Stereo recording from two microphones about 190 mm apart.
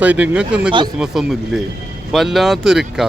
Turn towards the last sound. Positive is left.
turn(degrees=0)  # may be behind; listen again after turning